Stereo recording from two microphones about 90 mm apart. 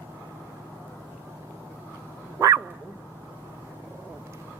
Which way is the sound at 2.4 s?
40° right (ahead or behind).